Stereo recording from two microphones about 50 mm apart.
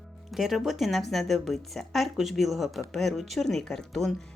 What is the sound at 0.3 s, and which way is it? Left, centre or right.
A woman's voice, centre.